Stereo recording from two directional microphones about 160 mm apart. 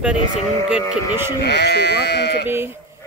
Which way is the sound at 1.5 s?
90° left.